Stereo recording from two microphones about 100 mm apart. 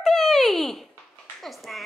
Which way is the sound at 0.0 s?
5° left (ahead or behind).